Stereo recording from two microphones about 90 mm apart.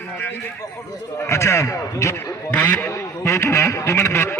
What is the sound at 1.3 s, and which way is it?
Speech, 30° left (ahead or behind).